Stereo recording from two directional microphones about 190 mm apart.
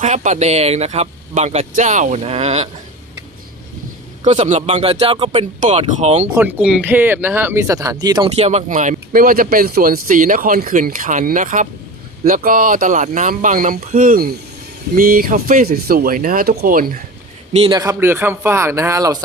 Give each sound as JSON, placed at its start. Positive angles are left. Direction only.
{"t": 0.0, "sound": "speech", "side_deg": -40}
{"t": 4.3, "sound": "speech", "side_deg": -40}
{"t": 6.2, "sound": "speech", "side_deg": -5}
{"t": 8.4, "sound": "speech", "side_deg": -35}
{"t": 17.6, "sound": "speech", "side_deg": -20}